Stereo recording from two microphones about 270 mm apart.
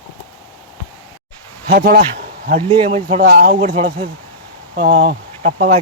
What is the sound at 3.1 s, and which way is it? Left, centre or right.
Speech, right.